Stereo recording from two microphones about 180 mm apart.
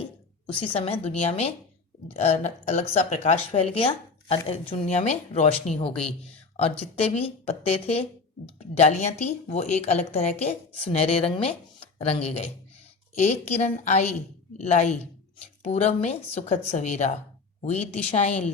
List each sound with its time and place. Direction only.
0.0 s a woman's voice: 30° left (ahead or behind)